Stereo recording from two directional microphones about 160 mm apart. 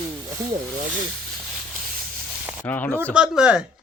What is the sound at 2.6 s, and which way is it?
Speech, 10° left (ahead or behind).